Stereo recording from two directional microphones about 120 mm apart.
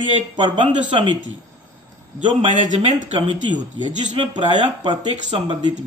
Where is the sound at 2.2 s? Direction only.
40° right (ahead or behind).